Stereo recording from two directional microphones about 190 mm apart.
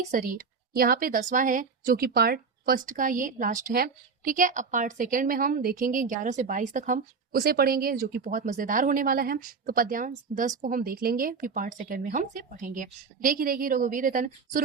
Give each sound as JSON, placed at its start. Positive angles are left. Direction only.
{"t": 0.1, "sound": "a woman's voice", "side_deg": -50}